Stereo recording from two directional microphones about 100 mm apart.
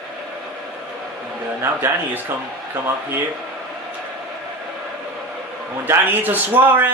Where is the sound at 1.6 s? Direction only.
20° right (ahead or behind).